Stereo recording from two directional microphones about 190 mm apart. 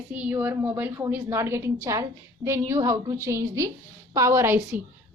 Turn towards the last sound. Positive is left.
turn(degrees=-10)  # may be behind; listen again after turning